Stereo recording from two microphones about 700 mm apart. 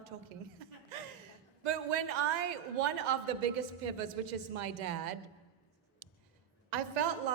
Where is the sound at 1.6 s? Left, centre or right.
Right.